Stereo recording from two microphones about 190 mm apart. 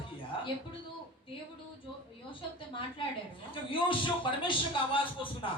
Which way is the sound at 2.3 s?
25° left (ahead or behind).